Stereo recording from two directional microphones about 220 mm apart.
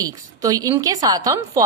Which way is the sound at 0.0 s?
15° right (ahead or behind).